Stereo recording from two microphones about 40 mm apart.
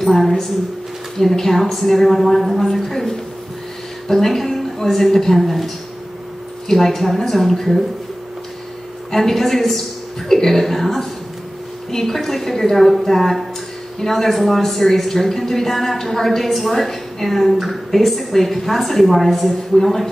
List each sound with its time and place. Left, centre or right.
0.0 s speech: centre
6.7 s speech: centre
9.1 s a woman's voice: centre